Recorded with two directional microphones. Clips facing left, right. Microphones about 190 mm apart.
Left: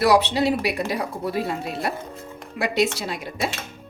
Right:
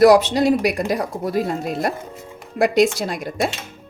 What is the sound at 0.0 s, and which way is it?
A man's voice, 45° right (ahead or behind).